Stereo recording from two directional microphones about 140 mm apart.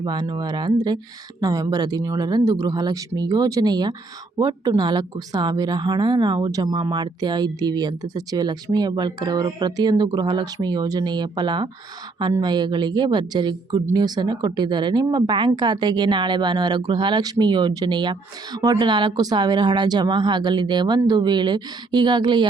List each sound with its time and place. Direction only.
0.0 s speech: 30° right (ahead or behind)